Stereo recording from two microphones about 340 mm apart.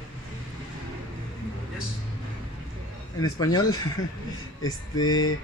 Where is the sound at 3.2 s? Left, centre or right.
Centre.